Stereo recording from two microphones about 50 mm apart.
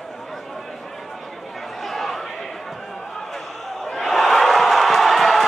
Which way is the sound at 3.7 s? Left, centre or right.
Centre.